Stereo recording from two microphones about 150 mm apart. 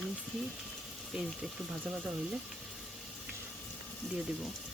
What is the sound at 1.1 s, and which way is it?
Speech, 5° right (ahead or behind).